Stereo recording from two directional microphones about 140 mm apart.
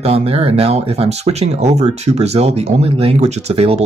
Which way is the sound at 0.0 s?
45° right (ahead or behind).